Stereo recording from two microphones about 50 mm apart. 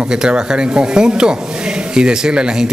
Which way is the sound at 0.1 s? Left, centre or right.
Centre.